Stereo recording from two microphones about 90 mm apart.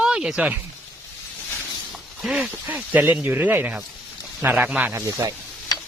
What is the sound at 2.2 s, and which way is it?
Speech, 10° right (ahead or behind).